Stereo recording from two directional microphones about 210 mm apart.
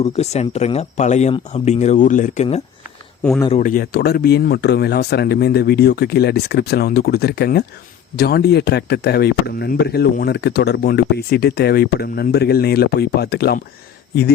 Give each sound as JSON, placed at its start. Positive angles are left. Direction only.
{"t": 0.0, "sound": "speech", "side_deg": 30}
{"t": 3.6, "sound": "speech", "side_deg": 40}